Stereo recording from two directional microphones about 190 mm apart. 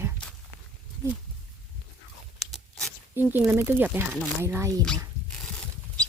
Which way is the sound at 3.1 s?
10° right (ahead or behind).